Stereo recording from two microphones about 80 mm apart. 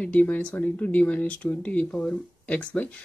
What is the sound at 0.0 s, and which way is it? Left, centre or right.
Speech, centre.